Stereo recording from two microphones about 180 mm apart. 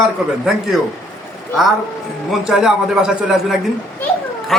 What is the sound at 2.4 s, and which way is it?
Speech, centre (ahead or behind).